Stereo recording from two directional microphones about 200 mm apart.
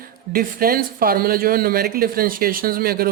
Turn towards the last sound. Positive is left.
turn(degrees=-50)  # may be behind; listen again after turning